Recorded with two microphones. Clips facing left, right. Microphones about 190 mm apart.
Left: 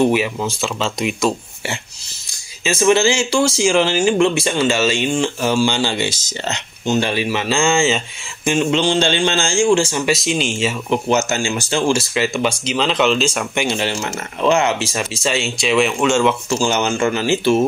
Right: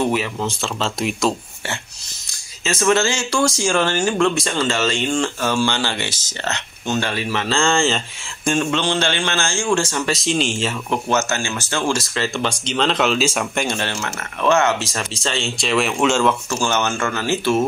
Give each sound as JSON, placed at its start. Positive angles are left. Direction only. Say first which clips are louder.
{"t": 0.0, "sound": "speech", "louder": "left 4 dB", "side_deg": 10}
{"t": 2.8, "sound": "speech", "louder": "left 4 dB", "side_deg": 10}
{"t": 8.5, "sound": "speech", "louder": "left 5 dB", "side_deg": 15}
{"t": 10.9, "sound": "speech", "louder": "left 3 dB", "side_deg": 15}
{"t": 14.0, "sound": "speech", "louder": "left 1 dB", "side_deg": 20}
{"t": 16.6, "sound": "speech", "louder": "left 3 dB", "side_deg": 15}